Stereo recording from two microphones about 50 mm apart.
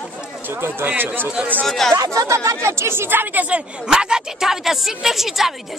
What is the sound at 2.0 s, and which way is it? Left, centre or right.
Speech, right.